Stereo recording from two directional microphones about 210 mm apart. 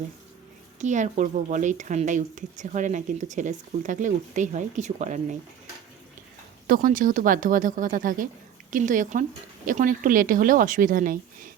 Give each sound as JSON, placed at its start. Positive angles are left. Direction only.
{"t": 0.8, "sound": "a woman's voice", "side_deg": -35}
{"t": 6.7, "sound": "a woman's voice", "side_deg": -40}